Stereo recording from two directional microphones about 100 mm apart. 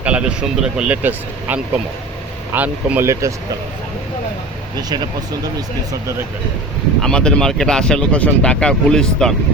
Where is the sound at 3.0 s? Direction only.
30° right (ahead or behind).